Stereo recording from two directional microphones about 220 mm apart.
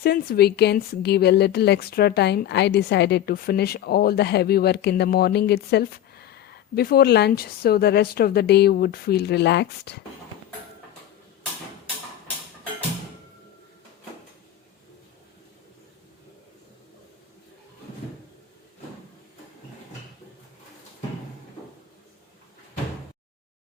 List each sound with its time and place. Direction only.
0.0 s a woman's voice: 45° left (ahead or behind)